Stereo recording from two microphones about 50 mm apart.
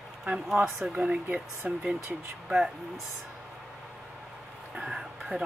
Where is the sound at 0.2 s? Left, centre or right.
Centre.